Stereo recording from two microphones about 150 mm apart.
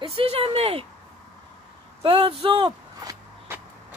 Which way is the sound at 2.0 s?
35° right (ahead or behind).